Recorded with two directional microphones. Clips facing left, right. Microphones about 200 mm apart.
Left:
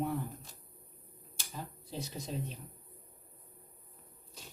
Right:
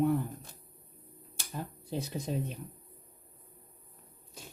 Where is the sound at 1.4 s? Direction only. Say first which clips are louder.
Right 5 dB; 55° right (ahead or behind).